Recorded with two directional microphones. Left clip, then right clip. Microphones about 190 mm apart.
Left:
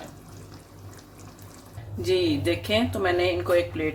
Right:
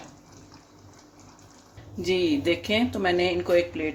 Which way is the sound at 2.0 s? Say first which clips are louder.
Even; 15° right (ahead or behind).